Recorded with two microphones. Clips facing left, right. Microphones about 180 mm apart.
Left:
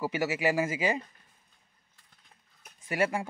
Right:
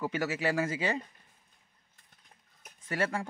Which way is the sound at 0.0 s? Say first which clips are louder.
Left 3 dB; 10° left (ahead or behind).